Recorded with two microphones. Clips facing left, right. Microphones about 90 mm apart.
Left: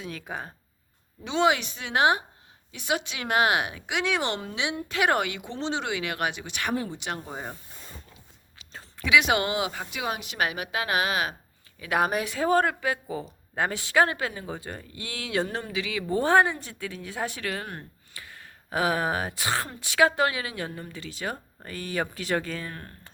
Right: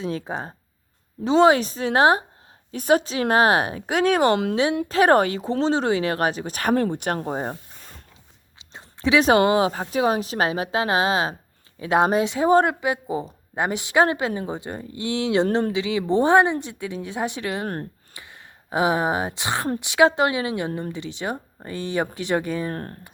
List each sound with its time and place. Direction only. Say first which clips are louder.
0.0 s a woman's voice: right 8 dB; 30° right (ahead or behind)
6.7 s speech: right 9 dB; 55° right (ahead or behind)
8.5 s a sound: right 1 dB; 20° right (ahead or behind)
9.0 s a woman's voice: right 6 dB; 35° right (ahead or behind); by 22.7 s 20° right (ahead or behind)
22.7 s a woman's voice: right 10 dB; 40° right (ahead or behind)